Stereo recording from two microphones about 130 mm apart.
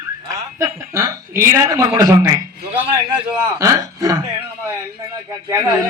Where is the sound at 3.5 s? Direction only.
25° right (ahead or behind).